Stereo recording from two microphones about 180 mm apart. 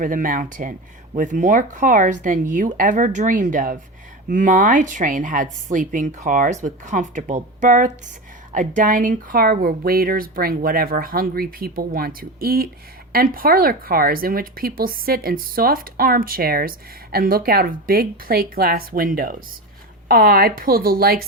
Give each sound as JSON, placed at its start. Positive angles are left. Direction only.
{"t": 0.0, "sound": "speech", "side_deg": -50}